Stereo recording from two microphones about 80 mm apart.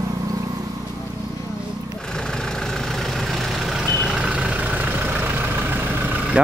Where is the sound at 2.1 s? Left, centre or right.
Centre.